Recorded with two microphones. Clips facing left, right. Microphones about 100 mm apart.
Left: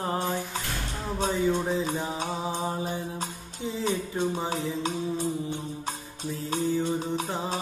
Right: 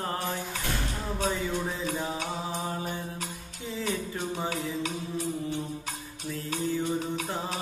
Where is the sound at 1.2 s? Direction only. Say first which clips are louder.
Left 5 dB; 25° left (ahead or behind).